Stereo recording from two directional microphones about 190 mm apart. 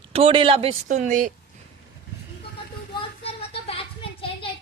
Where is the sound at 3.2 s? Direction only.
30° left (ahead or behind).